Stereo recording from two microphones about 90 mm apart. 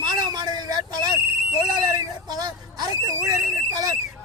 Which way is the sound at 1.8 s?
45° right (ahead or behind).